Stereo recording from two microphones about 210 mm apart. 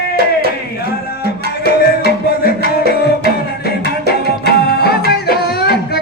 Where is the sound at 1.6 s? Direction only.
45° left (ahead or behind).